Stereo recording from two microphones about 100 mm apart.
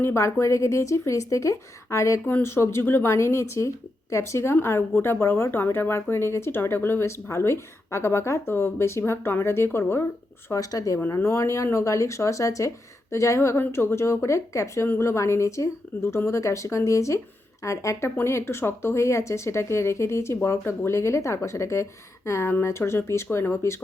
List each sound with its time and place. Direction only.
0.0 s speech: 25° left (ahead or behind)
10.5 s speech: 35° left (ahead or behind)
11.0 s speech: 25° left (ahead or behind)